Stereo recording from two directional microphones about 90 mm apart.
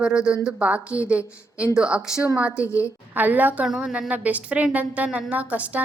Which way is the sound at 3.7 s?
5° right (ahead or behind).